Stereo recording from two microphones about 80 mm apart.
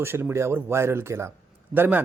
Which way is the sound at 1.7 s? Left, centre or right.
Right.